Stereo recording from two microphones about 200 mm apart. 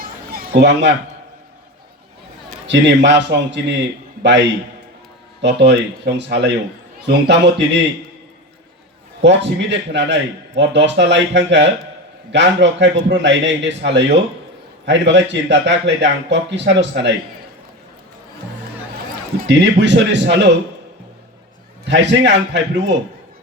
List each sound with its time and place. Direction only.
0.3 s a man's voice: 60° right (ahead or behind)
2.6 s a man's voice: 60° right (ahead or behind)
9.2 s a man's voice: 65° right (ahead or behind)
19.4 s a man's voice: 60° right (ahead or behind)
21.8 s a man's voice: 60° right (ahead or behind)